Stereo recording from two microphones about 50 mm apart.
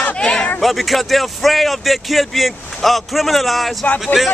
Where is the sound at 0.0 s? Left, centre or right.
Centre.